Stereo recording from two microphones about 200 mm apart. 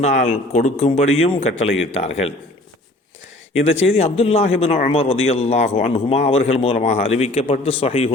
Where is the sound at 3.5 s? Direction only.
30° left (ahead or behind).